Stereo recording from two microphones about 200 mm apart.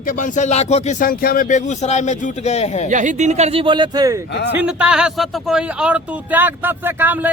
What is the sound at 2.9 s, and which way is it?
Speech, 40° right (ahead or behind).